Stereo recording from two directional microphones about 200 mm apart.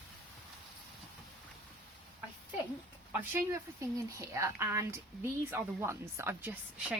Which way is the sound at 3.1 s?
10° right (ahead or behind).